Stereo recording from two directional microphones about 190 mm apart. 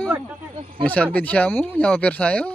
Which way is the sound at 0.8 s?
5° left (ahead or behind).